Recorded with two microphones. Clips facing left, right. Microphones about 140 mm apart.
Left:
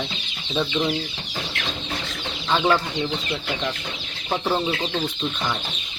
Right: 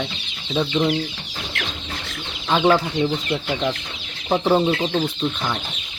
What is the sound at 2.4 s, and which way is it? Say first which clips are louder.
Speech: right 3 dB; 10° right (ahead or behind).